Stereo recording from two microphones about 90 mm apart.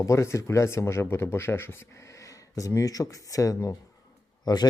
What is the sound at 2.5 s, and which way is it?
Speech, 40° left (ahead or behind).